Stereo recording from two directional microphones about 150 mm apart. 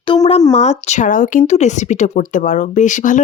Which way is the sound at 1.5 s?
50° left (ahead or behind).